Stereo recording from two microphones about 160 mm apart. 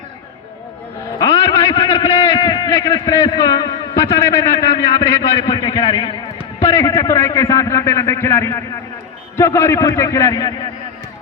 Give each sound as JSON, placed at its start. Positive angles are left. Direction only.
{"t": 1.2, "sound": "a sound", "side_deg": 20}
{"t": 1.7, "sound": "a man's voice", "side_deg": 25}
{"t": 6.6, "sound": "a man's voice", "side_deg": 20}